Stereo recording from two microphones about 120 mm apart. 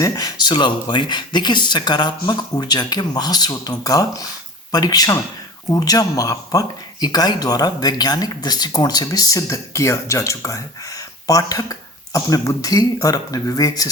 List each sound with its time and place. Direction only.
0.0 s speech: 30° left (ahead or behind)